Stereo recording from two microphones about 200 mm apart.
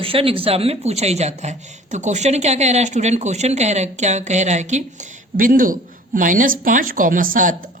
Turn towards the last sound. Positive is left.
turn(degrees=-40)  # may be behind; listen again after turning